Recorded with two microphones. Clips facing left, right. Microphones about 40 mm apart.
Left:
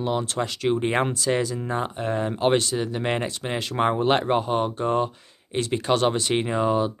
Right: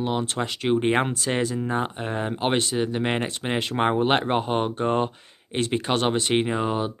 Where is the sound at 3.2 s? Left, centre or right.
Right.